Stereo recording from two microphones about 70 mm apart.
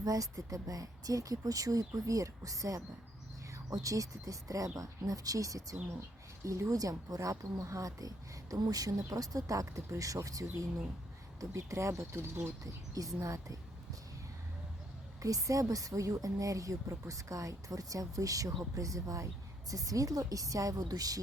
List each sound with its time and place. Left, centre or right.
0.0 s a woman's voice: right
12.9 s a woman's voice: right
15.2 s a woman's voice: right